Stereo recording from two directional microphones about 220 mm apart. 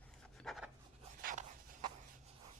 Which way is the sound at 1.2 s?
40° right (ahead or behind).